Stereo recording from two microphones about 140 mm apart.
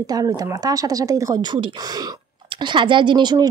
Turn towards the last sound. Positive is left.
turn(degrees=-30)  # may be behind; listen again after turning